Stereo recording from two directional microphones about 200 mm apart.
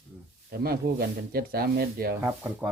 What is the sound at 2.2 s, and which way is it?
Speech, 10° right (ahead or behind).